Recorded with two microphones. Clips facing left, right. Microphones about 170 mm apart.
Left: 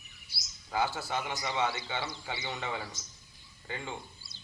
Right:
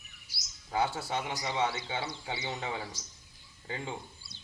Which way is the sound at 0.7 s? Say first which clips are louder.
Right 1 dB; 25° right (ahead or behind).